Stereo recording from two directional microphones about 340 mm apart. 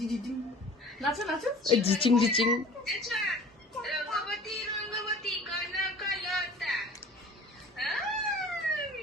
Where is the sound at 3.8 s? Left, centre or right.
Centre.